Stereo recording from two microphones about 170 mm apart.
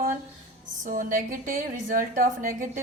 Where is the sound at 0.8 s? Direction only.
55° right (ahead or behind).